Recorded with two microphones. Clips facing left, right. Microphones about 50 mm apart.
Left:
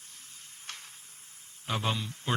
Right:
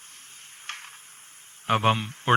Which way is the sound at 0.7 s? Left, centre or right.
Right.